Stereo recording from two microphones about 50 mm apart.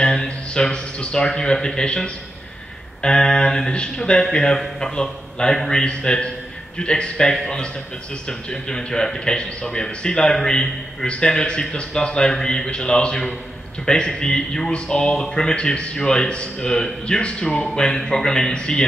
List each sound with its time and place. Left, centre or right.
0.0 s a man's voice: centre